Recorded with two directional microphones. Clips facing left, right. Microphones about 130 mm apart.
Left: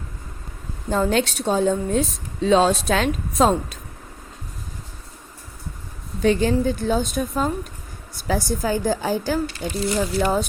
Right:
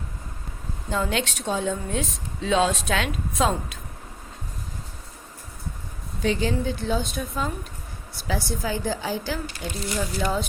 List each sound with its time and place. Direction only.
0.9 s a woman's voice: 40° left (ahead or behind)
6.2 s a woman's voice: 50° left (ahead or behind)